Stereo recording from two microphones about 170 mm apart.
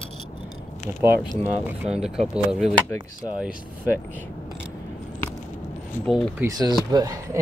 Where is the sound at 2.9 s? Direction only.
25° left (ahead or behind).